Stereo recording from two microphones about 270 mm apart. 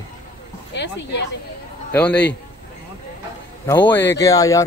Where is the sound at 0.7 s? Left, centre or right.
Left.